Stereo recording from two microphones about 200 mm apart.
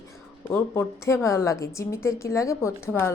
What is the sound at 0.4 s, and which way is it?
A woman's voice, 10° left (ahead or behind).